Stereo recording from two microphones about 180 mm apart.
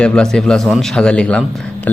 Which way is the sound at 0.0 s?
5° left (ahead or behind).